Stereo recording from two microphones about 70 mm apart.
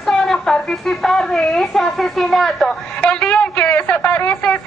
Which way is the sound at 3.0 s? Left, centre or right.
Centre.